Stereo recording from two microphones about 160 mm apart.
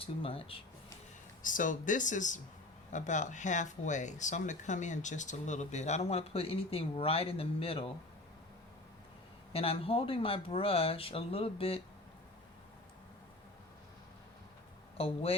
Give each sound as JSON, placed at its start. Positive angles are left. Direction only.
{"t": 0.0, "sound": "speech", "side_deg": 35}
{"t": 1.4, "sound": "speech", "side_deg": 55}
{"t": 9.5, "sound": "speech", "side_deg": 35}
{"t": 14.9, "sound": "speech", "side_deg": 35}